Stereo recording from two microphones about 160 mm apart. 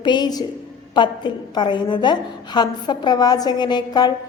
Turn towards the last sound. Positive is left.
turn(degrees=25)  # may be behind; listen again after turning